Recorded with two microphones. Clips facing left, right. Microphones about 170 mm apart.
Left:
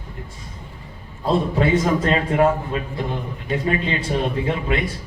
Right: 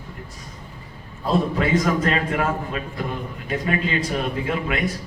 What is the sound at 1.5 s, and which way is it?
A man's voice, 30° left (ahead or behind).